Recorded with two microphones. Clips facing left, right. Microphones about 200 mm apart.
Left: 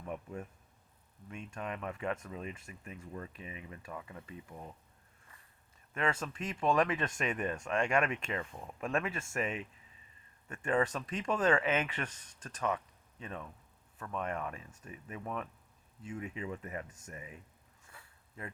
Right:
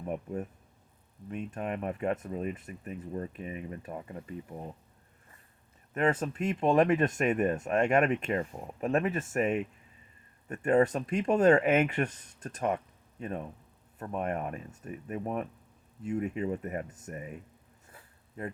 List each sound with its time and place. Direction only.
0.1 s speech: 40° right (ahead or behind)
1.5 s speech: 40° right (ahead or behind)
3.3 s speech: 45° right (ahead or behind)
5.9 s speech: 40° right (ahead or behind)
10.7 s speech: 40° right (ahead or behind)
17.8 s a sound: 40° right (ahead or behind)